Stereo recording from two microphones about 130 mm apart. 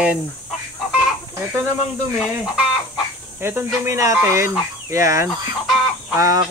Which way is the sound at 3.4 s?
20° right (ahead or behind).